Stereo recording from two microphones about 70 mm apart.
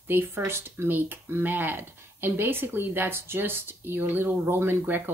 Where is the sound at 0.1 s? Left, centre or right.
Right.